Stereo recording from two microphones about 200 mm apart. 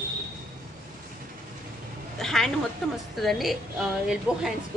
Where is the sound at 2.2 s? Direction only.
Centre (ahead or behind).